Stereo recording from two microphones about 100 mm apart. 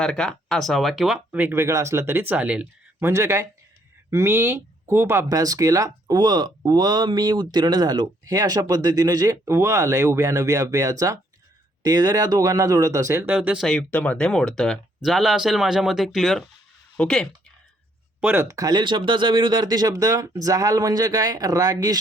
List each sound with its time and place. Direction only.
0.0 s speech: 5° left (ahead or behind)
1.3 s speech: 20° right (ahead or behind)
3.0 s speech: 30° right (ahead or behind)
13.2 s speech: 15° right (ahead or behind)
13.6 s speech: 10° left (ahead or behind)
18.2 s speech: 20° right (ahead or behind)
18.4 s speech: 35° right (ahead or behind)